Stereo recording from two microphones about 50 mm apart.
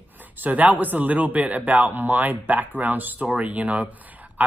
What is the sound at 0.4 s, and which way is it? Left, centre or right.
Speech, right.